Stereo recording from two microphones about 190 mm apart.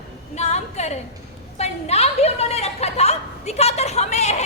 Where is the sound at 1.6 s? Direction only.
35° left (ahead or behind).